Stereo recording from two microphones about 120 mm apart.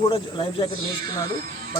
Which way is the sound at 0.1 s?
45° left (ahead or behind).